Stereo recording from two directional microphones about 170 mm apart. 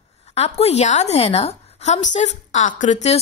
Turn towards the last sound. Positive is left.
turn(degrees=40)  # may be behind; listen again after turning